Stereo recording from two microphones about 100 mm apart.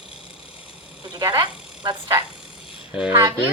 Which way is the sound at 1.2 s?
40° right (ahead or behind).